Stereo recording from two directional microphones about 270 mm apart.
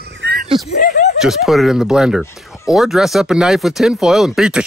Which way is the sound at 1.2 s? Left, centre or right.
Centre.